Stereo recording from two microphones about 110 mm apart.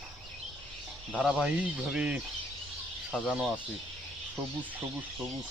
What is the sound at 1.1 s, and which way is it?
Speech, 10° right (ahead or behind).